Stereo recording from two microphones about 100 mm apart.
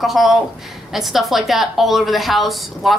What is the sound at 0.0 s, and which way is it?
A woman's voice, centre (ahead or behind).